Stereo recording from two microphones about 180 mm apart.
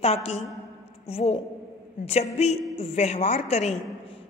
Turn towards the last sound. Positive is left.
turn(degrees=40)  # may be behind; listen again after turning